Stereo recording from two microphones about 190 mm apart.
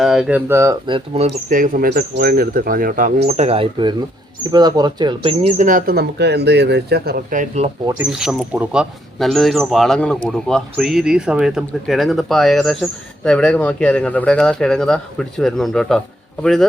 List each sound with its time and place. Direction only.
0.0 s speech: centre (ahead or behind)
0.9 s speech: 30° right (ahead or behind)
1.5 s speech: 45° right (ahead or behind)
8.1 s speech: centre (ahead or behind)